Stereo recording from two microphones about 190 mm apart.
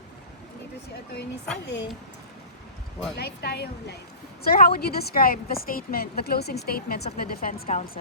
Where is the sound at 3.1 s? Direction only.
60° left (ahead or behind).